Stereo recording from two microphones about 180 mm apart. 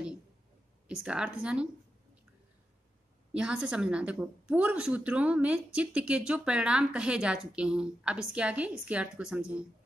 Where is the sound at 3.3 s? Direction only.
5° right (ahead or behind).